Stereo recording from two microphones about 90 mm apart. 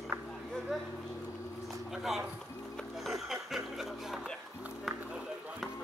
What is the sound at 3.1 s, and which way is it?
Speech, 5° right (ahead or behind).